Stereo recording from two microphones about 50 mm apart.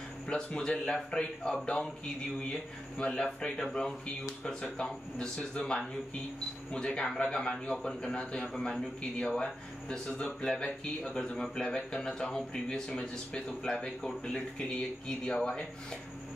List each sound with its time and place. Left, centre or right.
0.3 s speech: centre